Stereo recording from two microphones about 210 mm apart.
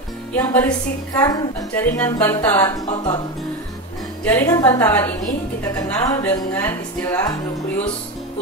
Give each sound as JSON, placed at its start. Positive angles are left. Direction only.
{"t": 0.3, "sound": "a woman's voice", "side_deg": 5}
{"t": 4.2, "sound": "a woman's voice", "side_deg": 10}